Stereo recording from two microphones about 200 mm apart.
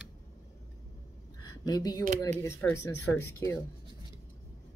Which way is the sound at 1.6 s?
20° left (ahead or behind).